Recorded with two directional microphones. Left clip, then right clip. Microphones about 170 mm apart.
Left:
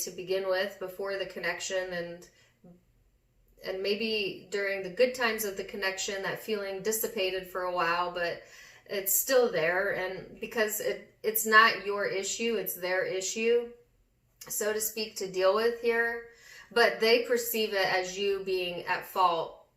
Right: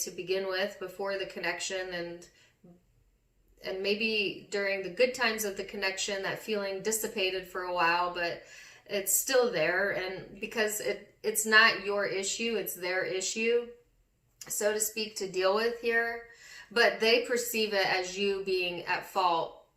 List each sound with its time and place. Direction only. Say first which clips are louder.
0.0 s a woman's voice: left 1 dB; 15° right (ahead or behind)
3.6 s a woman's voice: even; 15° right (ahead or behind)